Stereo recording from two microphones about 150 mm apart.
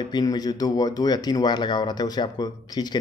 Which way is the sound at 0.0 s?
30° left (ahead or behind).